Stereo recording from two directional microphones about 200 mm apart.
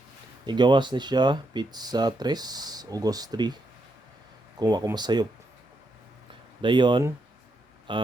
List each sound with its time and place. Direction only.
0.4 s speech: 20° right (ahead or behind)
4.6 s speech: 20° right (ahead or behind)
6.6 s speech: 25° right (ahead or behind)